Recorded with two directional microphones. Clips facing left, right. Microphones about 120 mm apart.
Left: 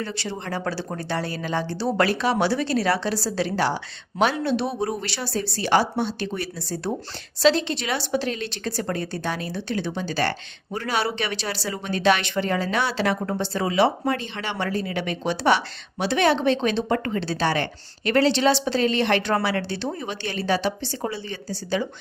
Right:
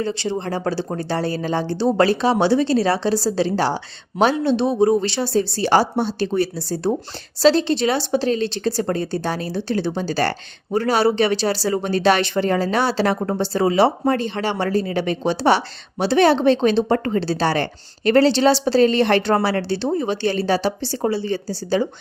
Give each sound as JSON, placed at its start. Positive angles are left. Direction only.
{"t": 0.0, "sound": "speech", "side_deg": -25}